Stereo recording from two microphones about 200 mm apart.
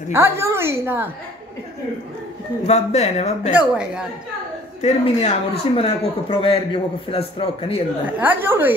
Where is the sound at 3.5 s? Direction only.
5° right (ahead or behind).